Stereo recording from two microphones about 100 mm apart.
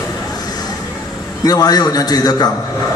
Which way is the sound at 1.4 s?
40° left (ahead or behind).